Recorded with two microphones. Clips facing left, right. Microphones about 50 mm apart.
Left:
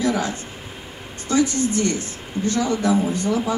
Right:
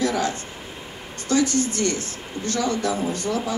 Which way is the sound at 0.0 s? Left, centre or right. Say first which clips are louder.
Left 1 dB; left.